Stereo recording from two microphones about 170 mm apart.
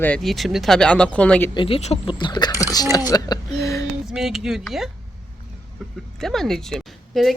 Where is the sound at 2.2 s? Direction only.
25° left (ahead or behind).